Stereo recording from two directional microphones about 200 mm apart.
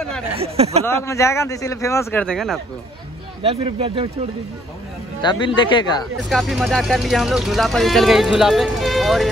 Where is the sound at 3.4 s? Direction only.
30° right (ahead or behind).